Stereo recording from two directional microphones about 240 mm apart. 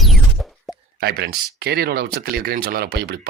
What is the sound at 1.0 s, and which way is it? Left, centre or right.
Speech, right.